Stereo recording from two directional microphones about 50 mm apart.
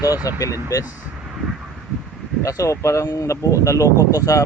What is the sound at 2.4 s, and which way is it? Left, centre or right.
A man's voice, left.